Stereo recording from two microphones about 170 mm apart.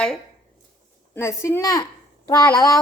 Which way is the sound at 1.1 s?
15° left (ahead or behind).